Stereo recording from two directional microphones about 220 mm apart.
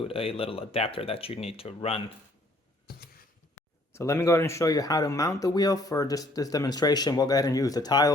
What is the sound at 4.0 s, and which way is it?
Speech, 10° left (ahead or behind).